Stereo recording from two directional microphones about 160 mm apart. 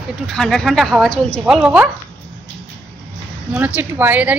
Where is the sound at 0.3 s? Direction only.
5° left (ahead or behind).